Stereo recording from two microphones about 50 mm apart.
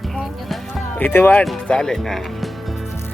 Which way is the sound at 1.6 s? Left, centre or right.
Centre.